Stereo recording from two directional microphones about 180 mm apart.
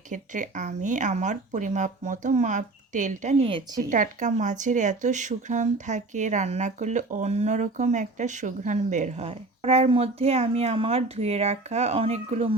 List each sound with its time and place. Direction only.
0.1 s speech: 45° right (ahead or behind)